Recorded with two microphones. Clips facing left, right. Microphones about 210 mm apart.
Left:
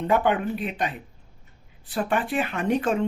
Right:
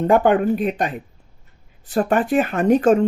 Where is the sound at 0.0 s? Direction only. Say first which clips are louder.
Right 7 dB; 45° right (ahead or behind).